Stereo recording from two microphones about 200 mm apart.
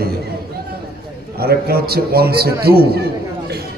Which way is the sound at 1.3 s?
50° right (ahead or behind).